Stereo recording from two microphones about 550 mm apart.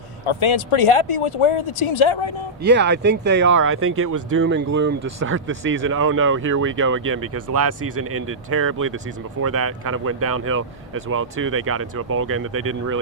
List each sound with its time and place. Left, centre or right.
0.3 s speech: left
2.6 s speech: centre